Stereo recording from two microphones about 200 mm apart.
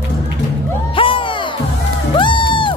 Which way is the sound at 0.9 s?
25° left (ahead or behind).